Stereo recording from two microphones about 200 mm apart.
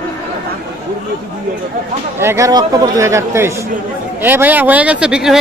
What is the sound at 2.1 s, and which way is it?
Speech, 15° right (ahead or behind).